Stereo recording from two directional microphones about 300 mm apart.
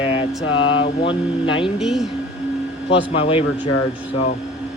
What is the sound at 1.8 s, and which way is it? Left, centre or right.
Speech, centre.